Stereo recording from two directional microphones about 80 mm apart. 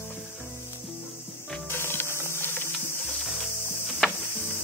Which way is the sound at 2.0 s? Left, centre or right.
Right.